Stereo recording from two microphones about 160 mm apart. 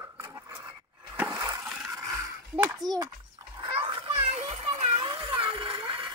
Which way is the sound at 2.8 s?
25° right (ahead or behind).